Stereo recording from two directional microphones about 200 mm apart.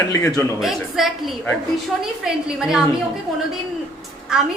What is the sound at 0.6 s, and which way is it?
A woman's voice, centre (ahead or behind).